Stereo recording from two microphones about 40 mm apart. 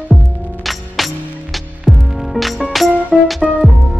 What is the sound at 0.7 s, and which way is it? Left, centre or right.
Music, centre.